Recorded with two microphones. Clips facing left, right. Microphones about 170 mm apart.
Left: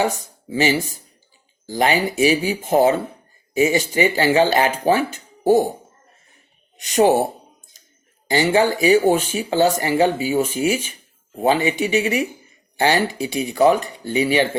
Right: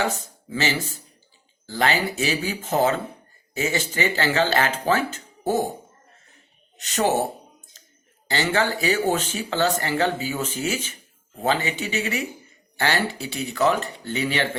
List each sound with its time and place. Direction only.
0.0 s speech: 15° left (ahead or behind)
6.7 s speech: 15° left (ahead or behind)
7.7 s a sound: 15° left (ahead or behind)
8.3 s speech: 15° left (ahead or behind)